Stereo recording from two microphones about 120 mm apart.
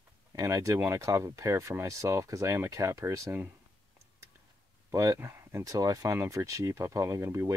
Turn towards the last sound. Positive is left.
turn(degrees=-20)  # may be behind; listen again after turning